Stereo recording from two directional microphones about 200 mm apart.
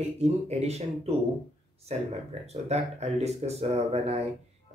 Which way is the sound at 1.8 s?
30° right (ahead or behind).